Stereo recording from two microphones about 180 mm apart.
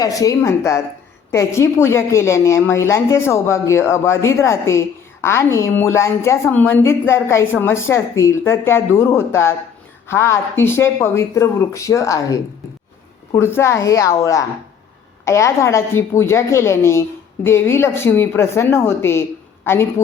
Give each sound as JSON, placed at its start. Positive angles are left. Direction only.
{"t": 0.0, "sound": "a woman's voice", "side_deg": 20}